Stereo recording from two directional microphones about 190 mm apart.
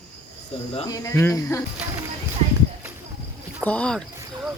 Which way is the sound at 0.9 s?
15° left (ahead or behind).